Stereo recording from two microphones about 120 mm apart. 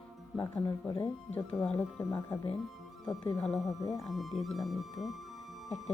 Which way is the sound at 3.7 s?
30° left (ahead or behind).